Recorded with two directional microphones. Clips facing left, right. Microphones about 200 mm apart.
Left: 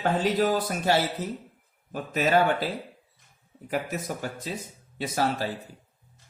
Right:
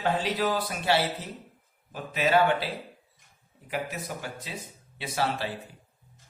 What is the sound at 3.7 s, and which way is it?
Speech, 45° left (ahead or behind).